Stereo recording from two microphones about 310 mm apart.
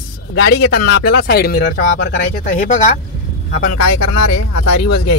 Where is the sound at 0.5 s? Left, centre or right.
Left.